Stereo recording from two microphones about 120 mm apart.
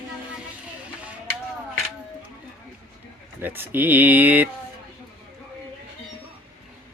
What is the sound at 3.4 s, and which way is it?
Speech, 15° right (ahead or behind).